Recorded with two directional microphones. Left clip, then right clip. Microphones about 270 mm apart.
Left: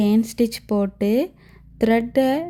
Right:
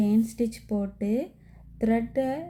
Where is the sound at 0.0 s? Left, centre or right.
Left.